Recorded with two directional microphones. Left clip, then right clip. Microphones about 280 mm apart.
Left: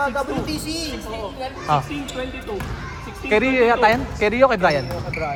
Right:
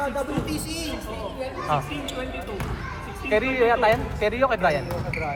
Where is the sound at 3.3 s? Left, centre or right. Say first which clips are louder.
Left 4 dB; left.